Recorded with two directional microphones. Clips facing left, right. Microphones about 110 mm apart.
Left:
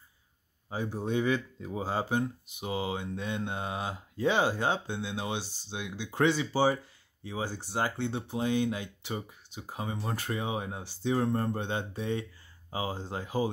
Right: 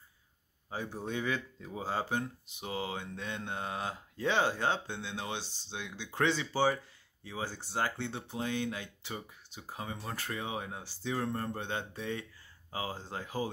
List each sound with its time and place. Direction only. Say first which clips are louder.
0.7 s speech: left 5 dB; 15° left (ahead or behind)